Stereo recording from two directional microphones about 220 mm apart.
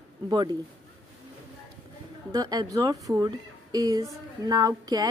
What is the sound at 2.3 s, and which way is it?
Speech, 15° right (ahead or behind).